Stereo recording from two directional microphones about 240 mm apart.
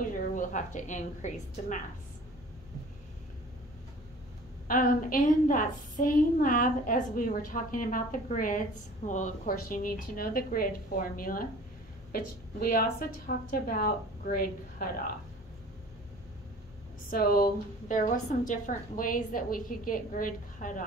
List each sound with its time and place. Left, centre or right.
0.0 s a woman's voice: left
4.6 s a woman's voice: left
17.1 s a woman's voice: left